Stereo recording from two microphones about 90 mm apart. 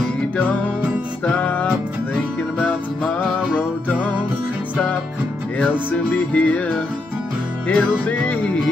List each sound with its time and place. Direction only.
1.2 s music: 15° left (ahead or behind)
5.6 s music: 15° left (ahead or behind)